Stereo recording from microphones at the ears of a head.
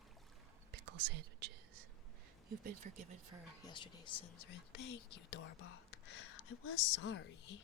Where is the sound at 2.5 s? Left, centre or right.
Right.